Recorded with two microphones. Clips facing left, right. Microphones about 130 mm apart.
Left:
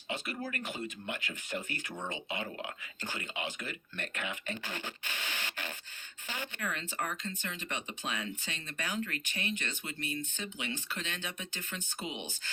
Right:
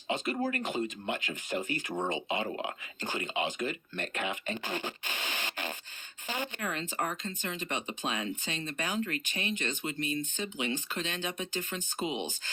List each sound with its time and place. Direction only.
0.5 s speech: 20° right (ahead or behind)